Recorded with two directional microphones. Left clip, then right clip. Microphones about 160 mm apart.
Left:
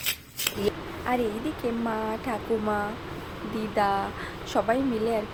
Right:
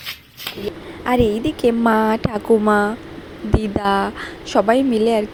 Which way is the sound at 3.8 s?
50° right (ahead or behind).